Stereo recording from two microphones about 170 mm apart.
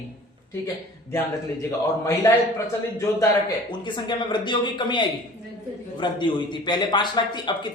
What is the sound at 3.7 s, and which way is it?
A man's voice, 25° left (ahead or behind).